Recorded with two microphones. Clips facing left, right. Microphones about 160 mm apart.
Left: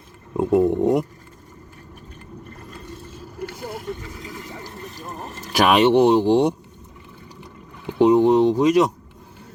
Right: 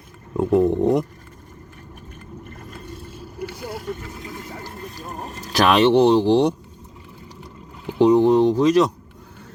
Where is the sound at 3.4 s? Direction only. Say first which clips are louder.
Right 1 dB; 5° right (ahead or behind).